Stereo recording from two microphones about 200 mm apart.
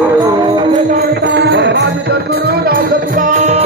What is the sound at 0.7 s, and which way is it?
Music, 45° right (ahead or behind).